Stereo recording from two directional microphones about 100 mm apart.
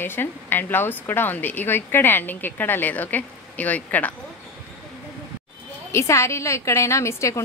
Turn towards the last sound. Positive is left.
turn(degrees=30)  # may be behind; listen again after turning